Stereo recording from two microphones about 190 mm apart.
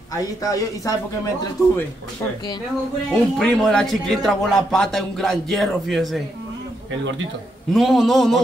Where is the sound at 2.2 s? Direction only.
15° left (ahead or behind).